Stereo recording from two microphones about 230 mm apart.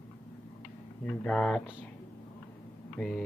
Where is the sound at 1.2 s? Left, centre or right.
Centre.